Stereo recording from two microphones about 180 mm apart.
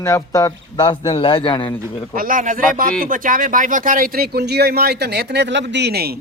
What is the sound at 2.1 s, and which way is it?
Speech, 50° right (ahead or behind).